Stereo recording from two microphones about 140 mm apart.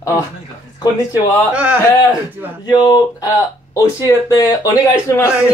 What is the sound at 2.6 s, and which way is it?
Speech, 30° left (ahead or behind).